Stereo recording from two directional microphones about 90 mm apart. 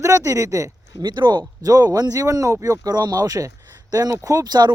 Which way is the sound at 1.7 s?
45° right (ahead or behind).